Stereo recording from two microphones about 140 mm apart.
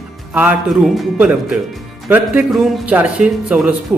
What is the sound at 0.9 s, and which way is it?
A man's voice, 5° right (ahead or behind).